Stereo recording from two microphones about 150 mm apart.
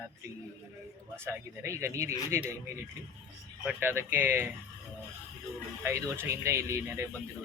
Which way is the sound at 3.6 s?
15° right (ahead or behind).